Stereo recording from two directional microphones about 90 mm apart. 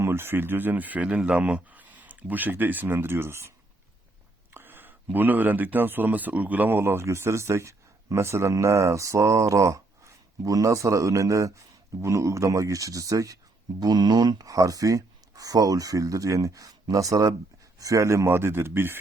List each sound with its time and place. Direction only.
0.0 s speech: 25° right (ahead or behind)
4.5 s speech: 25° right (ahead or behind)